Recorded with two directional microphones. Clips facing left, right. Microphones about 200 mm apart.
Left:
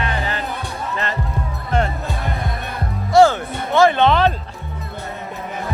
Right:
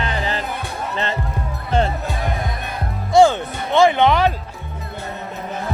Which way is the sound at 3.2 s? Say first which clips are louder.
Even; 15° right (ahead or behind).